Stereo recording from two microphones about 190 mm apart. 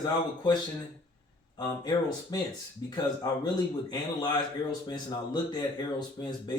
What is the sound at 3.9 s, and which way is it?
Speech, 20° left (ahead or behind).